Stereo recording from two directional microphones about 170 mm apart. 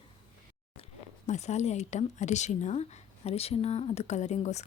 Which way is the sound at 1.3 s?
40° left (ahead or behind).